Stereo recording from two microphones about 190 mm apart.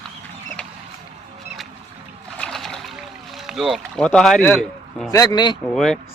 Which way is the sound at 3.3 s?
Centre (ahead or behind).